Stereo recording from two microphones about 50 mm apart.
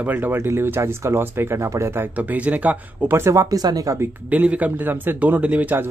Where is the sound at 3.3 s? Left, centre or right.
Right.